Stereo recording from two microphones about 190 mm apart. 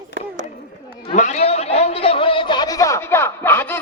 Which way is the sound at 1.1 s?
40° left (ahead or behind).